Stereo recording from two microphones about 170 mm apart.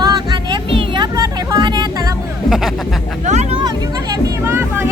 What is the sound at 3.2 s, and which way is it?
Speech, 40° right (ahead or behind).